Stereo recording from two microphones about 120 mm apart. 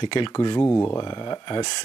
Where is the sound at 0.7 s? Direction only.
25° left (ahead or behind).